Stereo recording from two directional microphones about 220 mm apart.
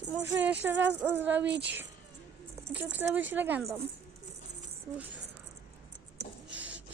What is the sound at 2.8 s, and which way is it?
A woman's voice, 5° right (ahead or behind).